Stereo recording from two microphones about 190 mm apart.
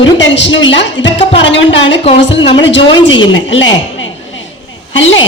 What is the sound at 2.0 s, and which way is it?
Speech, 30° left (ahead or behind).